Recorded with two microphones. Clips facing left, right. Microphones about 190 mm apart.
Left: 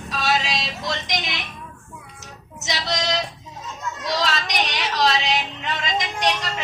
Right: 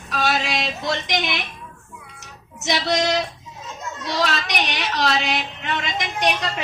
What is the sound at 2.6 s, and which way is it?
A woman's voice, 55° right (ahead or behind).